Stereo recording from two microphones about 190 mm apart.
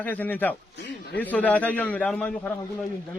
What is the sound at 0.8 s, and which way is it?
Speech, 65° left (ahead or behind).